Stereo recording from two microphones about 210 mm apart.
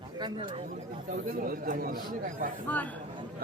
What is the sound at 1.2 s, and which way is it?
Speech, 45° right (ahead or behind).